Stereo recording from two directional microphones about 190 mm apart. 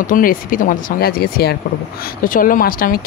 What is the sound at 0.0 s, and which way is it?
Speech, 45° left (ahead or behind).